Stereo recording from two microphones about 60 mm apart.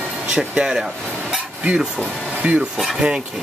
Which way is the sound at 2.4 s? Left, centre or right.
Centre.